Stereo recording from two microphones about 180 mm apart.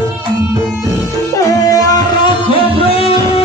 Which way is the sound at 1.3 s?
20° left (ahead or behind).